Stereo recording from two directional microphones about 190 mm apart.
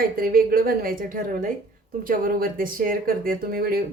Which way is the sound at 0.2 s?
50° right (ahead or behind).